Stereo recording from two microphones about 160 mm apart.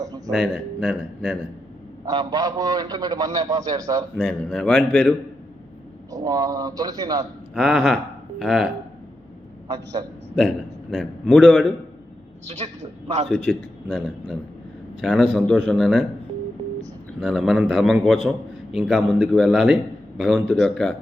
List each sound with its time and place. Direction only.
0.3 s a man's voice: centre (ahead or behind)
2.0 s a man's voice: 25° right (ahead or behind)
4.2 s a man's voice: 5° left (ahead or behind)
6.1 s a man's voice: 25° right (ahead or behind)
7.5 s a man's voice: centre (ahead or behind)
9.6 s a man's voice: 25° right (ahead or behind)
10.9 s a man's voice: 5° left (ahead or behind)
12.5 s a man's voice: 45° right (ahead or behind)
13.2 s a man's voice: centre (ahead or behind)
17.2 s a man's voice: centre (ahead or behind)